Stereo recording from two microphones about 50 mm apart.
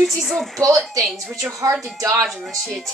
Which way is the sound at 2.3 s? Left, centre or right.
Centre.